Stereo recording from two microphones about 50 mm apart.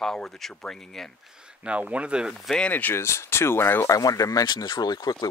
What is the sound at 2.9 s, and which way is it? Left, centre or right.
Speech, left.